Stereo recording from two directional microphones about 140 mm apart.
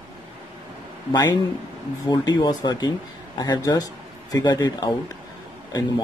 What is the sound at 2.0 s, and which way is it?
Speech, 30° left (ahead or behind).